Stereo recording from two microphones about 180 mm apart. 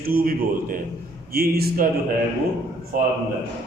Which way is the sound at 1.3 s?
60° right (ahead or behind).